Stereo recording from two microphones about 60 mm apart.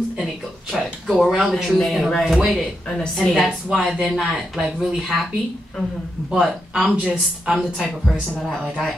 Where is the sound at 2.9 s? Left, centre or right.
Centre.